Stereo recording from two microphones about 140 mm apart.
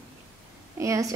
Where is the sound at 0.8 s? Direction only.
20° right (ahead or behind).